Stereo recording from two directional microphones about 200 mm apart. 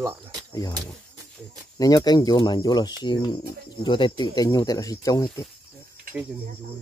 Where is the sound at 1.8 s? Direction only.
20° left (ahead or behind).